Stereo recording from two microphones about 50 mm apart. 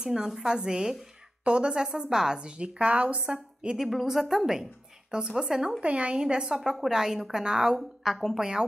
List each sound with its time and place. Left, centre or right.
0.0 s a woman's voice: centre
3.6 s a woman's voice: centre